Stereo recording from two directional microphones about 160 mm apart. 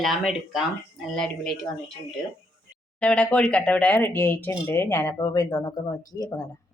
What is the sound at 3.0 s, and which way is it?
Speech, 5° left (ahead or behind).